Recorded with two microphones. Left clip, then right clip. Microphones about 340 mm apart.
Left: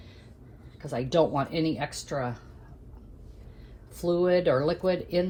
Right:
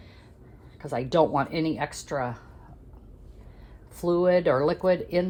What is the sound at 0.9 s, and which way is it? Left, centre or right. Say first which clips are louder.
Speech: right 2 dB; right.